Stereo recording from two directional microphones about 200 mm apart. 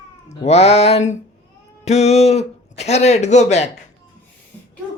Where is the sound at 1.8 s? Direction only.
35° left (ahead or behind).